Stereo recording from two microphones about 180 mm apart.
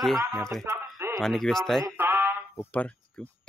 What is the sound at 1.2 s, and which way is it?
Speech, centre (ahead or behind).